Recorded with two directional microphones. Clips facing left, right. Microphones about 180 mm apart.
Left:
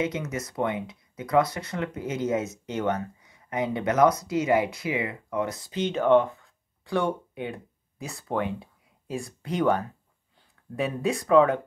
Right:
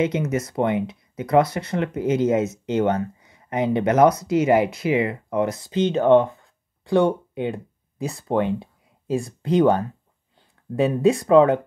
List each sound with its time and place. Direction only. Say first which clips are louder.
0.0 s speech: right 7 dB; 25° right (ahead or behind)